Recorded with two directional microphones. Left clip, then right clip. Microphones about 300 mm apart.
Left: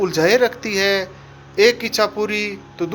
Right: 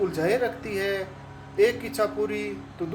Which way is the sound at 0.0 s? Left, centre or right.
Left.